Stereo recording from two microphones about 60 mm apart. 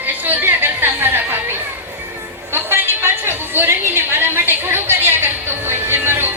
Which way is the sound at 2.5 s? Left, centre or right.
Right.